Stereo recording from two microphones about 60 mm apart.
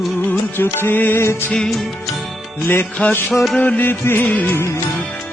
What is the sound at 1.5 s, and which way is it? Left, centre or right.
Music, centre.